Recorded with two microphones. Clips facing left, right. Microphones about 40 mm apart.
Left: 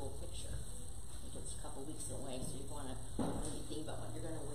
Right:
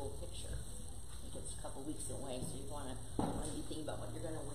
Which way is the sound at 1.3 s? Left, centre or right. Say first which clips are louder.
Right 2 dB; centre.